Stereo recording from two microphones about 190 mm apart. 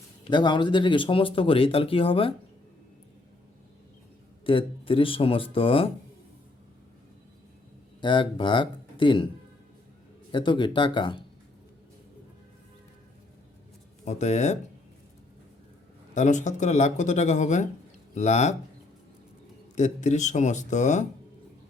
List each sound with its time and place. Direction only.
0.3 s speech: 25° left (ahead or behind)
4.4 s speech: 25° left (ahead or behind)
8.0 s speech: 25° left (ahead or behind)
10.3 s speech: 25° left (ahead or behind)
14.0 s speech: 35° left (ahead or behind)
16.1 s speech: 40° left (ahead or behind)
19.7 s speech: 40° left (ahead or behind)